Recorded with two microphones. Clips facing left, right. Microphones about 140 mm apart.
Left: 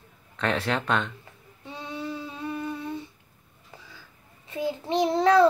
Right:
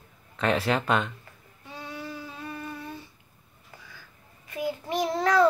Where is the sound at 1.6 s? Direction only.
20° left (ahead or behind).